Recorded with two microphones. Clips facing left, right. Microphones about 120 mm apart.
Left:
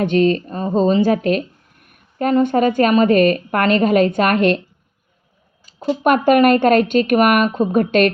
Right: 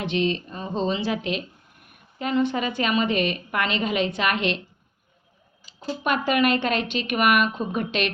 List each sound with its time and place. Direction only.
0.0 s a woman's voice: 45° left (ahead or behind)
5.6 s a woman's voice: 55° left (ahead or behind)